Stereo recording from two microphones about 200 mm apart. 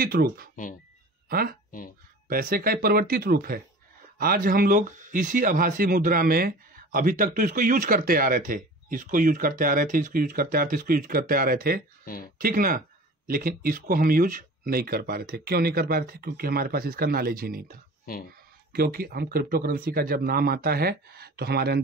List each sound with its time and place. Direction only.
0.0 s speech: 45° right (ahead or behind)
12.0 s speech: 45° left (ahead or behind)
12.4 s speech: 45° right (ahead or behind)